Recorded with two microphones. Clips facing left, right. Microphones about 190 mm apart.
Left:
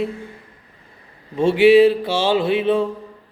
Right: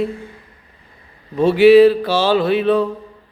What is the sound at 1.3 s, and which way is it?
Speech, 25° left (ahead or behind).